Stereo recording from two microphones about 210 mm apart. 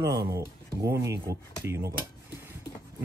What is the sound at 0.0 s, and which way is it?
Speech, 15° right (ahead or behind).